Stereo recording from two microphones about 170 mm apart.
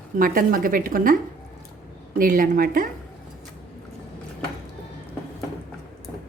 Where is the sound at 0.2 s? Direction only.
55° right (ahead or behind).